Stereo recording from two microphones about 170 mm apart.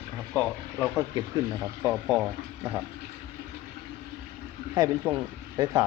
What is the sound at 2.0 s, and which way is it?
Speech, 5° right (ahead or behind).